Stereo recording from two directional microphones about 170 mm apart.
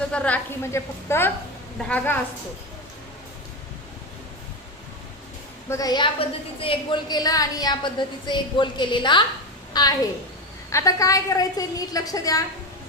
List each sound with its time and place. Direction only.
0.1 s a woman's voice: 5° left (ahead or behind)
5.6 s a woman's voice: 20° left (ahead or behind)